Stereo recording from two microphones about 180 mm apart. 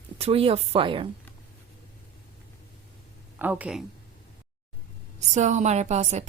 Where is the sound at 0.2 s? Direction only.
35° right (ahead or behind).